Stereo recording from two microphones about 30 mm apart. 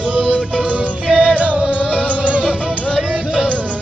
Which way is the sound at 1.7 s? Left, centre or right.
Left.